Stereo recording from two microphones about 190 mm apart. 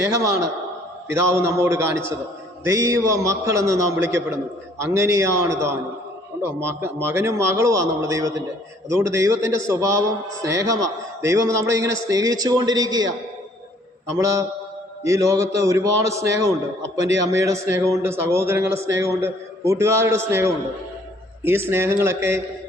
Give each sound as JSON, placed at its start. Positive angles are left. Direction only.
{"t": 0.0, "sound": "a man's voice", "side_deg": -15}
{"t": 14.1, "sound": "a man's voice", "side_deg": -15}